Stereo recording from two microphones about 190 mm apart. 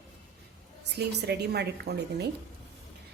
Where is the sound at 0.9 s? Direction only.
60° right (ahead or behind).